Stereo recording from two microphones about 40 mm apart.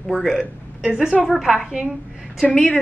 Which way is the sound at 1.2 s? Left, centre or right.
Centre.